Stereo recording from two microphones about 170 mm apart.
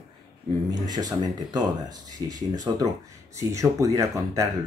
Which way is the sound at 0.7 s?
25° right (ahead or behind).